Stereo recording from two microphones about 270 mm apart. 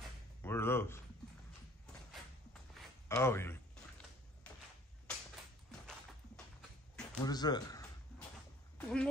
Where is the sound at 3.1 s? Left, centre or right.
Centre.